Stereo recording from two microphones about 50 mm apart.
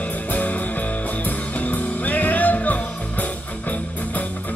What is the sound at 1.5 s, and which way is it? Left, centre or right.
Music, left.